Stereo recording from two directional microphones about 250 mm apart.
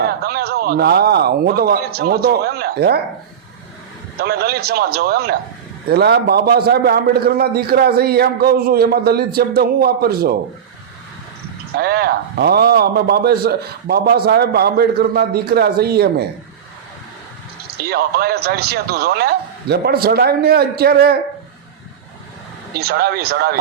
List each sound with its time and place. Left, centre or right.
0.0 s a man's voice: right
4.2 s a man's voice: right
11.7 s a man's voice: right
17.8 s a man's voice: right
22.8 s a man's voice: right